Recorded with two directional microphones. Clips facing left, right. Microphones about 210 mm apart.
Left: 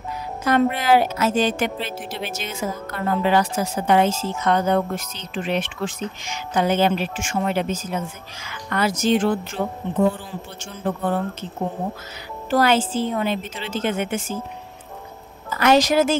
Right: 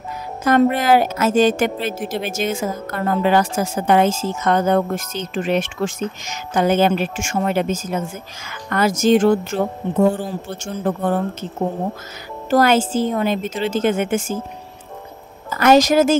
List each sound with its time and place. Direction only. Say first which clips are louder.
0.4 s a woman's voice: right 4 dB; 45° right (ahead or behind)
12.4 s a woman's voice: right 3 dB; 45° right (ahead or behind)
15.5 s a woman's voice: right 4 dB; 45° right (ahead or behind)